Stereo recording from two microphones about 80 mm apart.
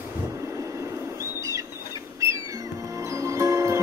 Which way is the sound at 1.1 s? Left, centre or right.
Right.